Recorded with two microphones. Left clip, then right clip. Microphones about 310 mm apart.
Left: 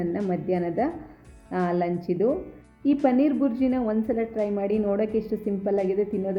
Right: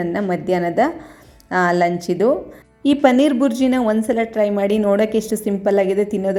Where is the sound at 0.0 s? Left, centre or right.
Centre.